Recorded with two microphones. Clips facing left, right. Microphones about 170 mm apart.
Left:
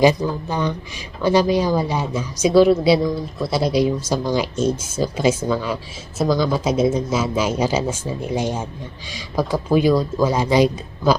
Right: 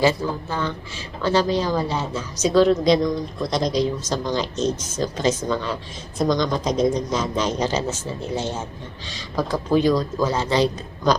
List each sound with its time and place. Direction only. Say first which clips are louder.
0.0 s a woman's voice: left 4 dB; 15° left (ahead or behind)